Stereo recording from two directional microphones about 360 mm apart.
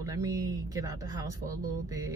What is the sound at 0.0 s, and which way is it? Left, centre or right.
Speech, centre.